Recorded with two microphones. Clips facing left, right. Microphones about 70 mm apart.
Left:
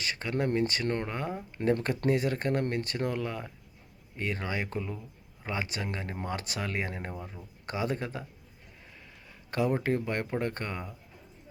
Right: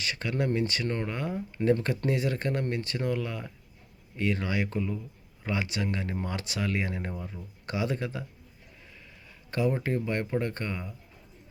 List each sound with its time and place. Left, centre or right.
0.0 s speech: left
9.5 s speech: left